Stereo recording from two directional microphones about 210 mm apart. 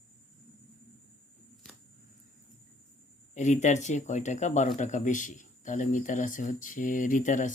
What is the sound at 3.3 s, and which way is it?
Speech, 35° left (ahead or behind).